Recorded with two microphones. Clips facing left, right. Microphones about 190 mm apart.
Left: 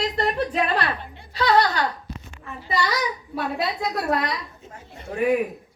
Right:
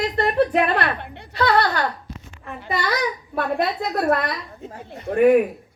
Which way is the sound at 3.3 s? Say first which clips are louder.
Right 4 dB; 55° right (ahead or behind).